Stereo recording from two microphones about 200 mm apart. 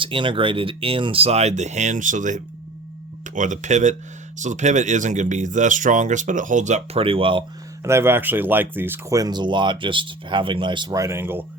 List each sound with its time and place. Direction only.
0.0 s speech: 25° right (ahead or behind)
7.9 s speech: 10° right (ahead or behind)